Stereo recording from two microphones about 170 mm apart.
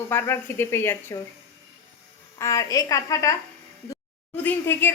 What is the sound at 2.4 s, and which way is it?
Speech, 20° left (ahead or behind).